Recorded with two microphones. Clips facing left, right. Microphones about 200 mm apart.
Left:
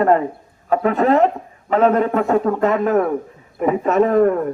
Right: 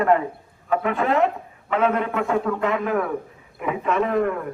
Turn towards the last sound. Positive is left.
turn(degrees=40)  # may be behind; listen again after turning